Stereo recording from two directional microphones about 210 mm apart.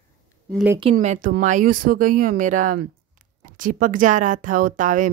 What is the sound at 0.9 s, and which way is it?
Speech, 35° right (ahead or behind).